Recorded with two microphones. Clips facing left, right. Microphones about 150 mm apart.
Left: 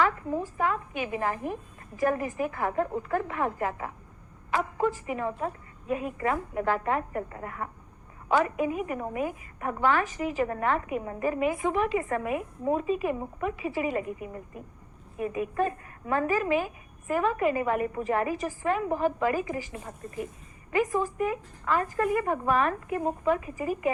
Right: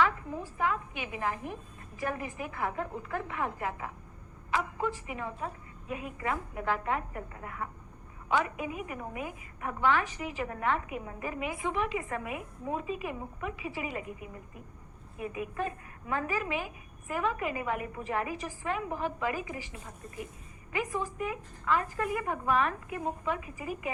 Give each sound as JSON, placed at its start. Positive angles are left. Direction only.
{"t": 0.6, "sound": "a woman's voice", "side_deg": 45}
{"t": 20.7, "sound": "a woman's voice", "side_deg": 45}